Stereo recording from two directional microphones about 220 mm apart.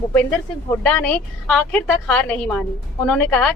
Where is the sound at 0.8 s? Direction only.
5° left (ahead or behind).